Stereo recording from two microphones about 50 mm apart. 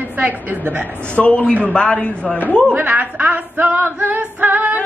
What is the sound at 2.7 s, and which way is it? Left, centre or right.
A woman's voice, right.